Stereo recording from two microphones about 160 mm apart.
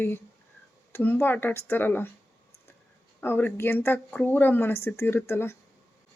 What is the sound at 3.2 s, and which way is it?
Speech, 10° left (ahead or behind).